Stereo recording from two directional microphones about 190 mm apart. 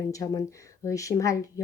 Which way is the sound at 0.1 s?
15° left (ahead or behind).